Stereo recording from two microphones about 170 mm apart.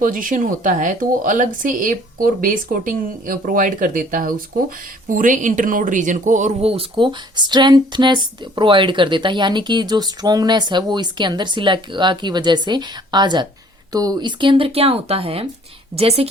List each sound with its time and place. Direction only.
0.0 s speech: 50° right (ahead or behind); by 16.3 s 35° right (ahead or behind)